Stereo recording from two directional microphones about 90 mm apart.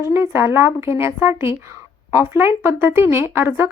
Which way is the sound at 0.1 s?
25° right (ahead or behind).